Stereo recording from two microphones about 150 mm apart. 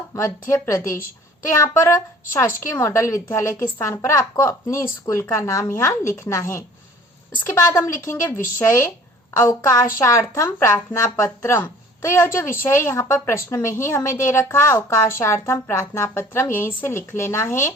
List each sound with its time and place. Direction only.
0.1 s a woman's voice: 20° left (ahead or behind)
9.4 s a woman's voice: 20° left (ahead or behind)